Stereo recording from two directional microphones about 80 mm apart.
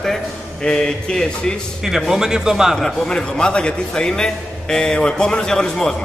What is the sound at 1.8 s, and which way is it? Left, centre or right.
Speech, centre.